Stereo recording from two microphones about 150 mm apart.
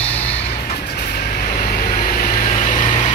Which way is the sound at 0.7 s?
90° left.